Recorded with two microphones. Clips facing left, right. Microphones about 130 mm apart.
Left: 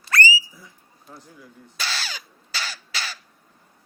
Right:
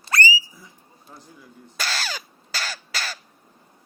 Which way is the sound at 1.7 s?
45° right (ahead or behind).